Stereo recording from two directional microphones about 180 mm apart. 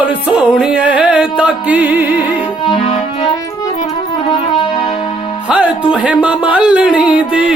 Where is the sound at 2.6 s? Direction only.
30° left (ahead or behind).